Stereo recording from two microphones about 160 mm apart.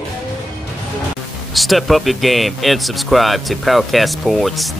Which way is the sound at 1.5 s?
Centre (ahead or behind).